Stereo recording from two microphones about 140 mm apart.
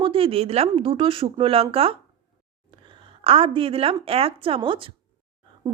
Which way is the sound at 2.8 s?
40° right (ahead or behind).